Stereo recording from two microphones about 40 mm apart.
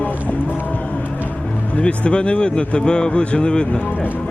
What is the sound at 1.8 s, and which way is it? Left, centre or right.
Speech, left.